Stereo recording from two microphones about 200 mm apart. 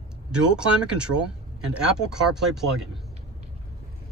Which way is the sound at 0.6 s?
5° right (ahead or behind).